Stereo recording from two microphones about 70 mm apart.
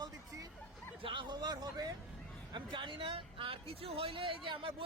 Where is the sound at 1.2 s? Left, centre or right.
Right.